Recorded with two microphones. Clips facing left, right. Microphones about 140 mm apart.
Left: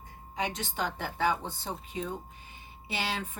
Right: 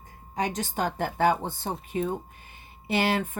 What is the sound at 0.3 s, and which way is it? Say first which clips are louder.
Speech: right 5 dB; 45° right (ahead or behind).